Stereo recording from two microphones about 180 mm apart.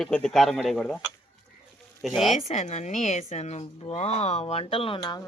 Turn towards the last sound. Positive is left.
turn(degrees=25)  # may be behind; listen again after turning